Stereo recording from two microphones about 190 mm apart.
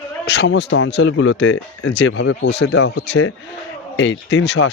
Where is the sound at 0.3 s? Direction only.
65° left (ahead or behind).